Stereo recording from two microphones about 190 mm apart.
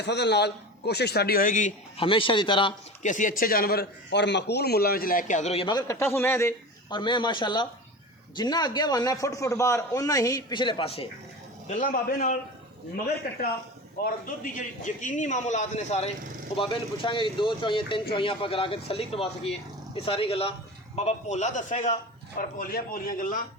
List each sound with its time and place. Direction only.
0.0 s a man's voice: 65° left (ahead or behind); by 1.7 s 45° left (ahead or behind)
2.0 s a man's voice: 25° left (ahead or behind)
3.0 s a man's voice: 40° left (ahead or behind); by 6.5 s 10° left (ahead or behind)
6.9 s a man's voice: 25° left (ahead or behind)
11.7 s a man's voice: 45° left (ahead or behind)
14.0 s a man's voice: 45° left (ahead or behind)